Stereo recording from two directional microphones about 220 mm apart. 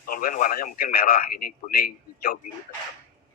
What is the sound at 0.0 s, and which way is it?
Speech, 40° left (ahead or behind).